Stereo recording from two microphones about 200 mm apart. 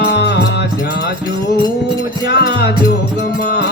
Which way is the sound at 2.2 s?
55° left (ahead or behind).